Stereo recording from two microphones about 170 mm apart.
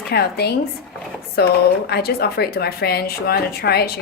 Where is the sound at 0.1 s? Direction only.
70° left (ahead or behind).